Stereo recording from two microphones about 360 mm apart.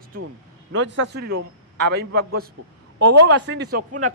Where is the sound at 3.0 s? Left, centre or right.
Right.